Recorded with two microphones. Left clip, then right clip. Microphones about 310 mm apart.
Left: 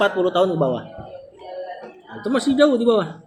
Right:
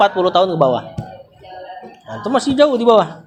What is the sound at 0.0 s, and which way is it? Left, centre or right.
Speech, centre.